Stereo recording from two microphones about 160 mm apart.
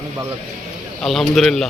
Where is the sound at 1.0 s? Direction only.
Centre (ahead or behind).